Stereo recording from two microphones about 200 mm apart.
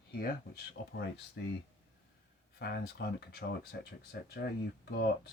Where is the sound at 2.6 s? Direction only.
55° left (ahead or behind).